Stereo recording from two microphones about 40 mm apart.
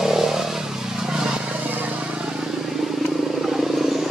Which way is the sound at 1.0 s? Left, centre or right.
Centre.